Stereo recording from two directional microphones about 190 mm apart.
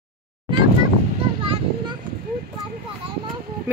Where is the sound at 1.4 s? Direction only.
30° right (ahead or behind).